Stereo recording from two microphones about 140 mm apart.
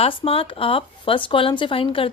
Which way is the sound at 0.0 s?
40° left (ahead or behind).